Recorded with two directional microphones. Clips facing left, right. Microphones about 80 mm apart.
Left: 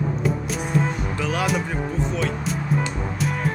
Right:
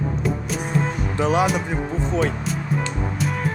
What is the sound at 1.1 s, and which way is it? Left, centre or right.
Speech, right.